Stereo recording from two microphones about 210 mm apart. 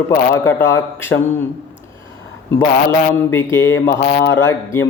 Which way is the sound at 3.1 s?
10° left (ahead or behind).